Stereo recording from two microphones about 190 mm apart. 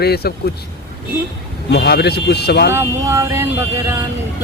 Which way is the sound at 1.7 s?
60° left (ahead or behind).